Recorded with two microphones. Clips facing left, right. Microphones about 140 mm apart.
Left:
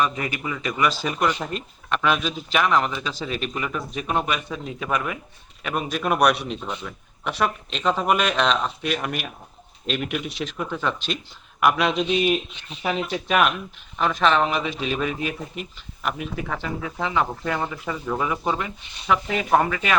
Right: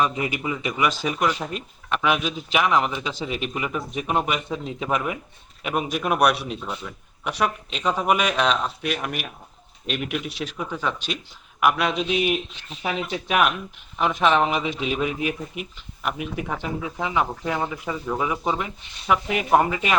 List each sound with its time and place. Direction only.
0.0 s a man's voice: 20° right (ahead or behind)
5.6 s speech: 10° right (ahead or behind)